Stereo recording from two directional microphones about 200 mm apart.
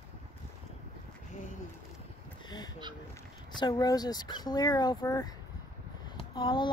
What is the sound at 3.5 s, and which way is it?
Speech, 20° left (ahead or behind).